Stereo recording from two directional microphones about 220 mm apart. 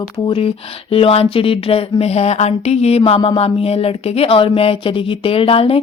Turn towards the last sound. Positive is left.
turn(degrees=25)  # may be behind; listen again after turning